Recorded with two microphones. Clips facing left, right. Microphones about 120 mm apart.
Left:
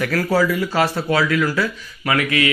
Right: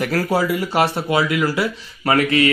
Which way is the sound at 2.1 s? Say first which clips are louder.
Right 3 dB; 35° right (ahead or behind).